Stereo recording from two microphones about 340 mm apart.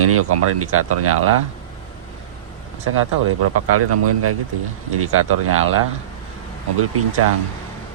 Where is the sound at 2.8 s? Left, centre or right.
Right.